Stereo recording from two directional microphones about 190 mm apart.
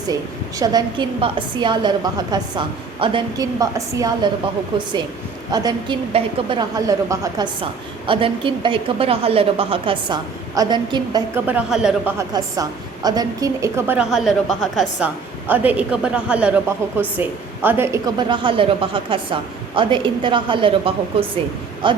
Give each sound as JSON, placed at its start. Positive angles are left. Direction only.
{"t": 0.6, "sound": "a woman's voice", "side_deg": -20}
{"t": 11.4, "sound": "speech", "side_deg": -5}
{"t": 12.3, "sound": "a woman's voice", "side_deg": -20}